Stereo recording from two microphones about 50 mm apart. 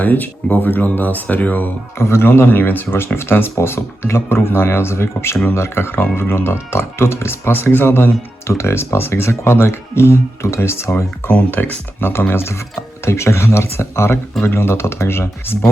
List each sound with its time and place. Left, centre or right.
0.0 s speech: left
2.0 s speech: left
11.3 s speech: left